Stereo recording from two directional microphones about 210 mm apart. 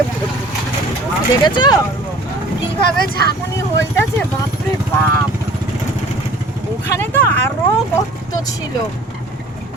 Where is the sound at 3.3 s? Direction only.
15° left (ahead or behind).